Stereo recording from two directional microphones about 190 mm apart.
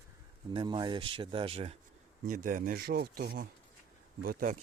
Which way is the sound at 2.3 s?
45° right (ahead or behind).